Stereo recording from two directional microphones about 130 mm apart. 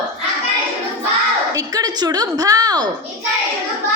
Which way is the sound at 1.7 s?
30° right (ahead or behind).